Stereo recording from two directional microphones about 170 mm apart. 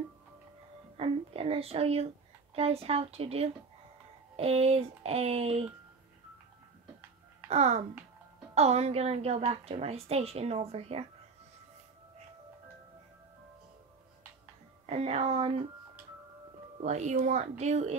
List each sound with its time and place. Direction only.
0.9 s a sound: 35° right (ahead or behind)
2.5 s a woman's voice: 35° right (ahead or behind)
7.4 s a child's voice: 40° right (ahead or behind)
14.9 s a woman's voice: 40° right (ahead or behind)
16.8 s a woman's voice: 45° right (ahead or behind)